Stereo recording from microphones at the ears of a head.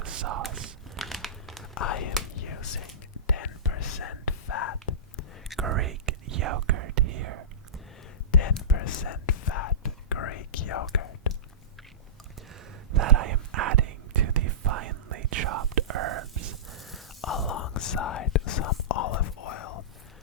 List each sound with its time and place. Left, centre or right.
0.0 s a sound: right
0.9 s crumpling: centre
1.7 s whispering: left
5.6 s whispering: right
8.3 s whispering: left
12.9 s whispering: right
17.2 s whispering: left